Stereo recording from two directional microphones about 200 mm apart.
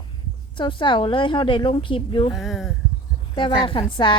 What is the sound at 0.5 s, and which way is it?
Speech, 25° left (ahead or behind).